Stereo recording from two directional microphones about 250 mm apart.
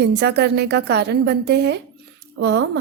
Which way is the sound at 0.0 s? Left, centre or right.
Right.